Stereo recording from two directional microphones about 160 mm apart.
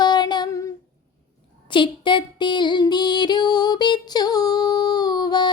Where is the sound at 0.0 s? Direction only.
25° left (ahead or behind).